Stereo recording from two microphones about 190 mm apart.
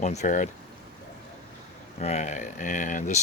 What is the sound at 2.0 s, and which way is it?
Speech, 35° left (ahead or behind).